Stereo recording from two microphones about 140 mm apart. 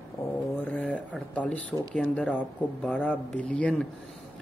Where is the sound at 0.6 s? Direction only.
10° left (ahead or behind).